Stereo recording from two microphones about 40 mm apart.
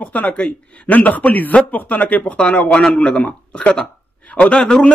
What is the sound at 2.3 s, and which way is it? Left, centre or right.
A man's voice, left.